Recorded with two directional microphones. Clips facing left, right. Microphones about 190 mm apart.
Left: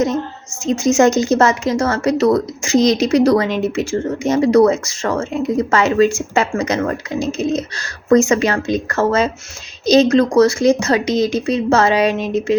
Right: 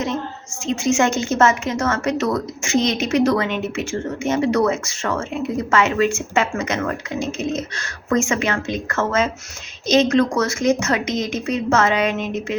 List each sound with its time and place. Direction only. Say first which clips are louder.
0.6 s speech: left 5 dB; 40° left (ahead or behind)